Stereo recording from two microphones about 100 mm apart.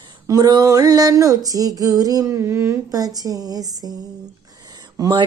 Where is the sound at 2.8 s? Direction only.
40° right (ahead or behind).